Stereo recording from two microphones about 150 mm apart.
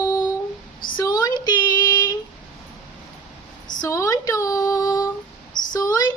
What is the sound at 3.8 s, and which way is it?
Female singing, 20° left (ahead or behind).